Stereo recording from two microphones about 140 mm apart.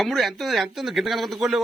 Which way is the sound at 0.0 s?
Centre (ahead or behind).